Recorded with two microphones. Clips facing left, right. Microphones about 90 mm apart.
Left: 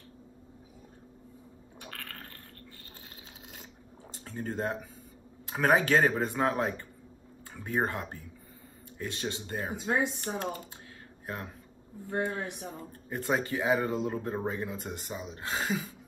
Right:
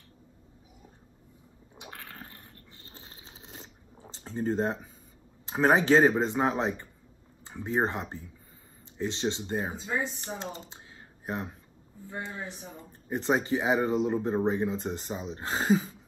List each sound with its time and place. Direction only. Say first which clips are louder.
1.8 s a sound: even; 15° right (ahead or behind)
5.5 s speech: right 3 dB; 25° right (ahead or behind)
12.4 s speech: left 3 dB; 60° left (ahead or behind)
12.7 s speech: right 3 dB; 25° right (ahead or behind)